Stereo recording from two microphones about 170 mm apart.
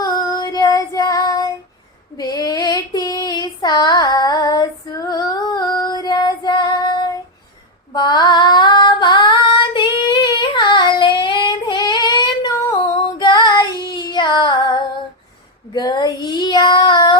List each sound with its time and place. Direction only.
0.0 s female singing: 20° left (ahead or behind)
15.7 s child singing: 25° left (ahead or behind)